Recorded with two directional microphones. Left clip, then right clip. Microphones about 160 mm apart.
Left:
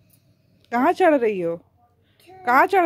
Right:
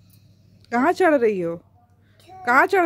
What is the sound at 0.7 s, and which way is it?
A child's voice, centre (ahead or behind).